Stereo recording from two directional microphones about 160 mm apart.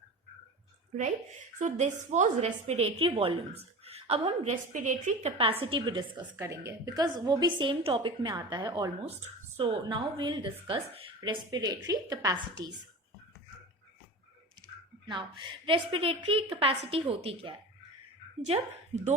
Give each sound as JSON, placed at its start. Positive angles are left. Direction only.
{"t": 1.5, "sound": "a woman's voice", "side_deg": -45}
{"t": 4.7, "sound": "a woman's voice", "side_deg": -50}
{"t": 5.4, "sound": "a woman's voice", "side_deg": -35}
{"t": 6.3, "sound": "a woman's voice", "side_deg": -20}
{"t": 15.0, "sound": "a woman's voice", "side_deg": -30}